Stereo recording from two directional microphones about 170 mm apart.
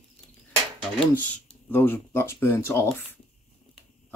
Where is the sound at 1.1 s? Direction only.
10° left (ahead or behind).